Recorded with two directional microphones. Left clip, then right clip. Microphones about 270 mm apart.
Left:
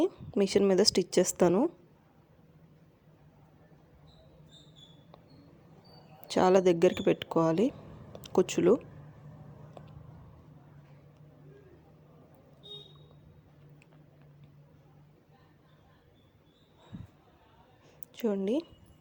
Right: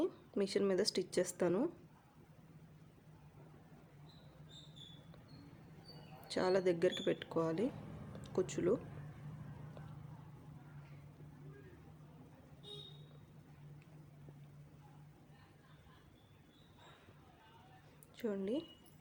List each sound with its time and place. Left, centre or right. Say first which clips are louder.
0.0 s a woman's voice: left 9 dB; left
6.2 s a woman's voice: left 11 dB; left
9.8 s a sound: left 9 dB; left
18.1 s a woman's voice: left 9 dB; left